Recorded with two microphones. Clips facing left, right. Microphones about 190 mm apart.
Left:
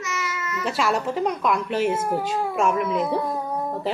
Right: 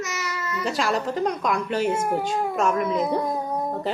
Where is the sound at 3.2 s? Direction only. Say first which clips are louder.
Right 1 dB; 15° right (ahead or behind).